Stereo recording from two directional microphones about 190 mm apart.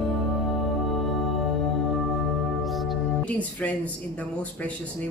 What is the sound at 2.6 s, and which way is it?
Speech, centre (ahead or behind).